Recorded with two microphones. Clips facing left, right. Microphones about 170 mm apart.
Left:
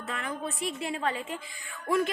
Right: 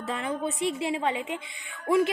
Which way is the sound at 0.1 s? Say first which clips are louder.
Right 5 dB; 25° right (ahead or behind).